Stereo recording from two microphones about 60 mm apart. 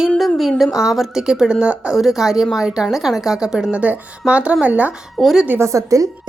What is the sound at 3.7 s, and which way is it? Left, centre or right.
A woman's voice, right.